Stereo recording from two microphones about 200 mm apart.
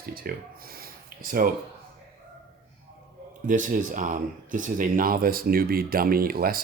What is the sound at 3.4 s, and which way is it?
Speech, 40° right (ahead or behind).